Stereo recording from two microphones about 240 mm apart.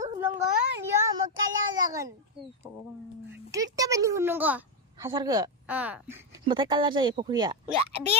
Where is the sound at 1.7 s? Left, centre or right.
Centre.